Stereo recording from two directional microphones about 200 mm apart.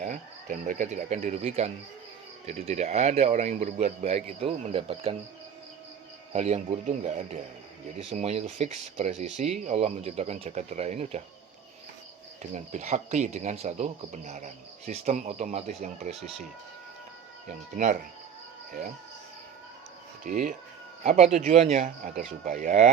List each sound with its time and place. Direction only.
0.0 s speech: 40° right (ahead or behind)
6.3 s speech: 35° right (ahead or behind)
12.4 s speech: 35° right (ahead or behind)
17.8 s speech: 40° right (ahead or behind)
20.2 s speech: 40° right (ahead or behind)